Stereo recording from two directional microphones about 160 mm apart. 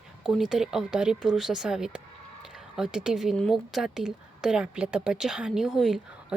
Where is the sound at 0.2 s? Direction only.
5° right (ahead or behind).